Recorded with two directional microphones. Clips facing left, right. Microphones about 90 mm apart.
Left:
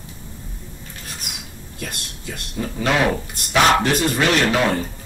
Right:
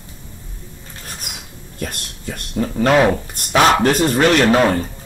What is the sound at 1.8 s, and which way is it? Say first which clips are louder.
Speech: right 4 dB; 40° right (ahead or behind).